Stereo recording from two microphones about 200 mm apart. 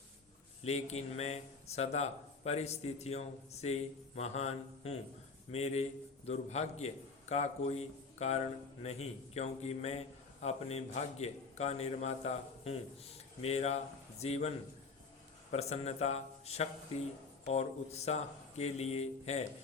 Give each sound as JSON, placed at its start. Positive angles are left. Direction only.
{"t": 0.6, "sound": "a man's voice", "side_deg": 35}
{"t": 15.5, "sound": "a man's voice", "side_deg": 30}